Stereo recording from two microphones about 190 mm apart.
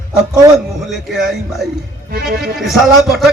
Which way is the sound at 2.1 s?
55° right (ahead or behind).